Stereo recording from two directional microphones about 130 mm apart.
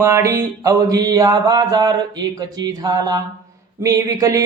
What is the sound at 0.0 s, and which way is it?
Speech, 20° right (ahead or behind).